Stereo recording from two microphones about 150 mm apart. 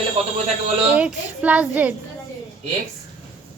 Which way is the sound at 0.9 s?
10° right (ahead or behind).